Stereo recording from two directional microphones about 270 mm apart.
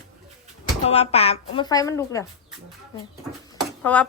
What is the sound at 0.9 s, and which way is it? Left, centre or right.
A woman's voice, left.